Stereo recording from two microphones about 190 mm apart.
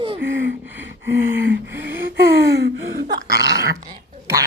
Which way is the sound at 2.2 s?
55° right (ahead or behind).